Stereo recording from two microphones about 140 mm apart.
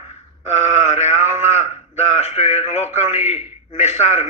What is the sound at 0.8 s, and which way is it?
A man's voice, 50° left (ahead or behind).